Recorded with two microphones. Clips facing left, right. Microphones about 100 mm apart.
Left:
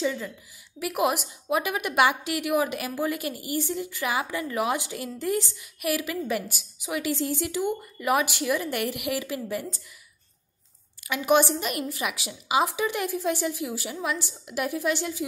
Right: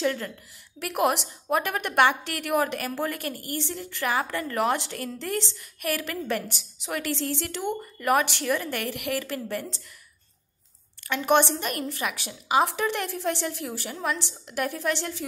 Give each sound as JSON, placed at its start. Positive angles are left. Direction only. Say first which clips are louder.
{"t": 0.0, "sound": "a woman's voice", "louder": "right 1 dB", "side_deg": 5}
{"t": 0.8, "sound": "a woman's voice", "louder": "right 1 dB", "side_deg": -55}
{"t": 1.1, "sound": "a woman's voice", "louder": "even", "side_deg": 5}
{"t": 3.2, "sound": "a woman's voice", "louder": "left 1 dB", "side_deg": -50}
{"t": 3.4, "sound": "a woman's voice", "louder": "left 4 dB", "side_deg": 5}
{"t": 11.1, "sound": "a woman's voice", "louder": "even", "side_deg": 10}